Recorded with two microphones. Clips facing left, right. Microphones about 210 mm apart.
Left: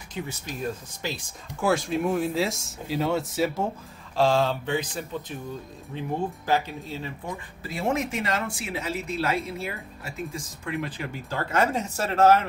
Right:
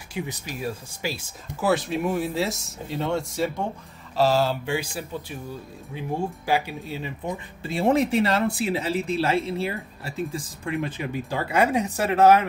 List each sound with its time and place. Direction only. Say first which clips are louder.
0.1 s speech: right 2 dB; 10° right (ahead or behind)
7.6 s speech: right 6 dB; 30° right (ahead or behind); by 12.4 s 15° right (ahead or behind)